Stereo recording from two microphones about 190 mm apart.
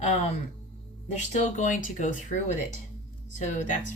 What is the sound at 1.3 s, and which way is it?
Speech, 40° left (ahead or behind).